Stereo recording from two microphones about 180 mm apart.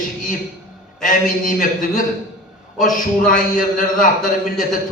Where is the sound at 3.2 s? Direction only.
50° left (ahead or behind).